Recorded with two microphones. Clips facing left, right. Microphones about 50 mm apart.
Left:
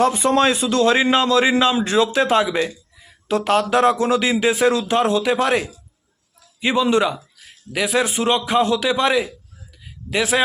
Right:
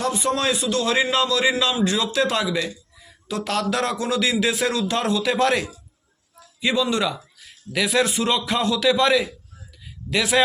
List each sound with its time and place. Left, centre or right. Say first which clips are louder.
0.0 s a man's voice: left 6 dB; left; by 10.4 s centre